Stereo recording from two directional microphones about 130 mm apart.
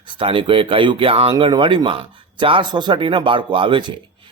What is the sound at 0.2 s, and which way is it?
A man's voice, 40° right (ahead or behind).